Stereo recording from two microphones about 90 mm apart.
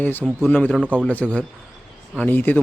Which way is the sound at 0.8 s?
15° right (ahead or behind).